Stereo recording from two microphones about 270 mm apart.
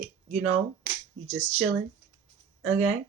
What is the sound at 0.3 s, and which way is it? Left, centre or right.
Speech, right.